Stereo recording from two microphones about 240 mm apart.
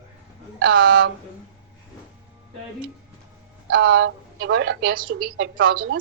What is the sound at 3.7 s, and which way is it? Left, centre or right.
A woman's voice, right.